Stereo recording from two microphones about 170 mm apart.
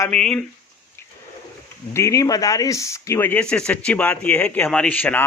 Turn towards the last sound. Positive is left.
turn(degrees=10)  # may be behind; listen again after turning